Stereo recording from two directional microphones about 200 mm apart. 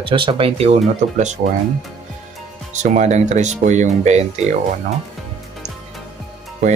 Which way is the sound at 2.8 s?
35° right (ahead or behind).